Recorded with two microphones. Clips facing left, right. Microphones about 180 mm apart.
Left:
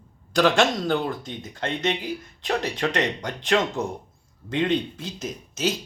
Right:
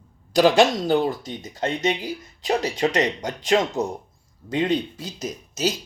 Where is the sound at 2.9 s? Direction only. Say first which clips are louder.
Right 3 dB; 40° right (ahead or behind).